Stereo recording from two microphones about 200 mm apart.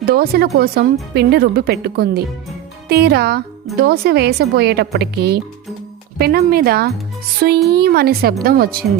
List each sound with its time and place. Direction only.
0.0 s a woman's voice: 50° right (ahead or behind)